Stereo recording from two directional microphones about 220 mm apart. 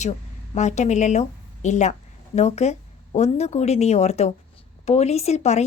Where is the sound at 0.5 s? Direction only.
30° left (ahead or behind).